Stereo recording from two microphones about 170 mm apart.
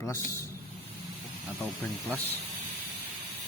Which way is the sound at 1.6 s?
5° left (ahead or behind).